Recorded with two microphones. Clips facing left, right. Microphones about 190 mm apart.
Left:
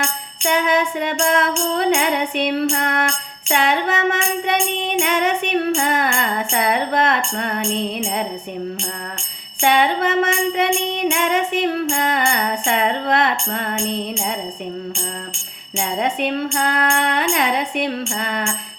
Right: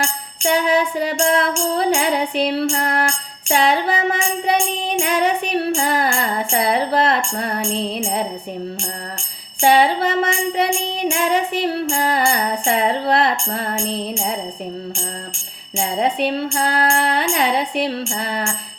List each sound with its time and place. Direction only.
0.5 s music: 35° right (ahead or behind)
9.6 s music: 35° right (ahead or behind)
15.7 s music: 35° right (ahead or behind)